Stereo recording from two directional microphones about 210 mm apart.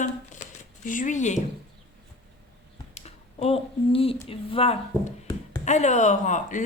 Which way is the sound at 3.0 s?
30° left (ahead or behind).